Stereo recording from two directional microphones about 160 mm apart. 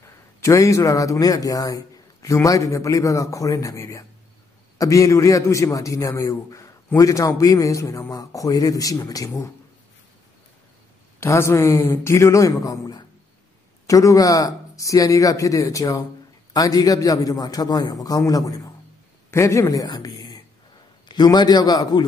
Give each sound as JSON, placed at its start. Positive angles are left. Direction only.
{"t": 0.0, "sound": "a man's voice", "side_deg": 20}
{"t": 11.1, "sound": "a man's voice", "side_deg": 15}